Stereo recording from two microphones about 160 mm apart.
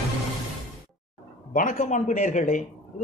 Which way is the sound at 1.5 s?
55° left (ahead or behind).